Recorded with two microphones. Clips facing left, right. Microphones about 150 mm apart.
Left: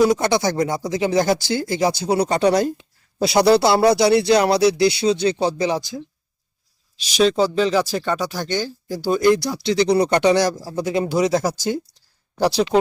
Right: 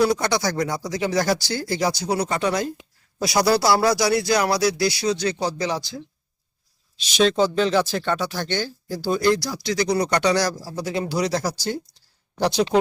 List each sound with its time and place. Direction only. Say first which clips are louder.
0.0 s speech: left 4 dB; 20° left (ahead or behind)
2.0 s speech: left 5 dB; 30° left (ahead or behind)
7.2 s speech: left 2 dB; 10° left (ahead or behind)